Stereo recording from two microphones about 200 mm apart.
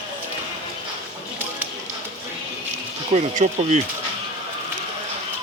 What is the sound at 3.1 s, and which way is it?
Speech, 35° right (ahead or behind).